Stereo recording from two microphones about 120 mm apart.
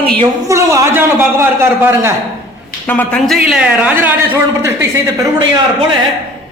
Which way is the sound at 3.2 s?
Centre (ahead or behind).